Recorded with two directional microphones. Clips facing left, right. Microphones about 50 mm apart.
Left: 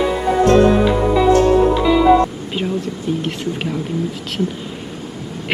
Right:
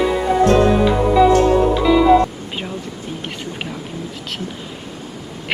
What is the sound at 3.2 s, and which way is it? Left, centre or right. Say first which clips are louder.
Speech: left 5 dB; centre.